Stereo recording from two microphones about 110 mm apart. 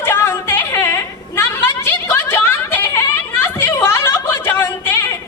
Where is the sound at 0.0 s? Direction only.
20° left (ahead or behind).